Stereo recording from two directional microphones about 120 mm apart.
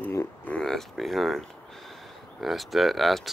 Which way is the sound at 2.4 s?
Centre (ahead or behind).